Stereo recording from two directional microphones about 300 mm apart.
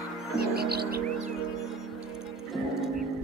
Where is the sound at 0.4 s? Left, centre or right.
Right.